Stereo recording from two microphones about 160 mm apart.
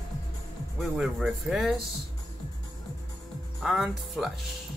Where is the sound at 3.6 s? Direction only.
Centre (ahead or behind).